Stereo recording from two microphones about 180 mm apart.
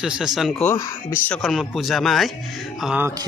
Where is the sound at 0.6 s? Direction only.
15° left (ahead or behind).